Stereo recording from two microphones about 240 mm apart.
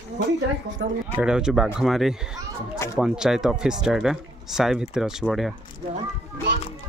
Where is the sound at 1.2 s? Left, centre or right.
Centre.